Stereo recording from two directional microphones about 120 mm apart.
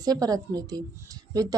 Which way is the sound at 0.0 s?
30° right (ahead or behind).